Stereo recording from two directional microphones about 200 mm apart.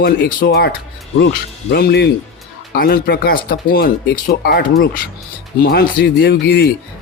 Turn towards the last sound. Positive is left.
turn(degrees=55)  # may be behind; listen again after turning